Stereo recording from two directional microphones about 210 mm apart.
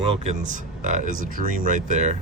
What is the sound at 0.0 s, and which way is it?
Speech, 30° right (ahead or behind).